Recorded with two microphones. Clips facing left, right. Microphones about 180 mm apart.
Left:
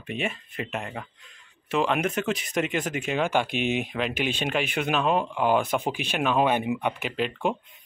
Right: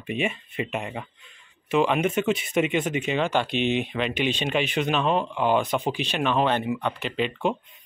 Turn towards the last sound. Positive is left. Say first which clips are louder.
# right 1 dB
turn(degrees=5)  # may be behind; listen again after turning